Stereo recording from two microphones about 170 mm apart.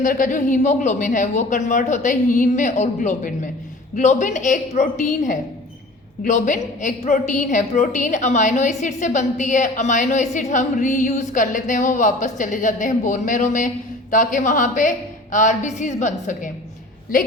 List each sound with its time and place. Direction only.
0.0 s a woman's voice: 50° left (ahead or behind)